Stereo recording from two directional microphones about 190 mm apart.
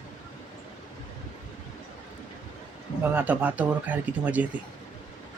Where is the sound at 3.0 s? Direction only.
10° right (ahead or behind).